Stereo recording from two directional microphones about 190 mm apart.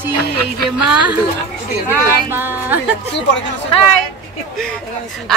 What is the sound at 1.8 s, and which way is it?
Speech, 10° right (ahead or behind).